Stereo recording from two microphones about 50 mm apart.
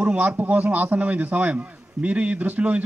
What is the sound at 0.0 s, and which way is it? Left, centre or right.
A man's voice, right.